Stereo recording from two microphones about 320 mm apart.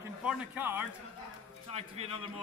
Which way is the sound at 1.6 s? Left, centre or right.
Centre.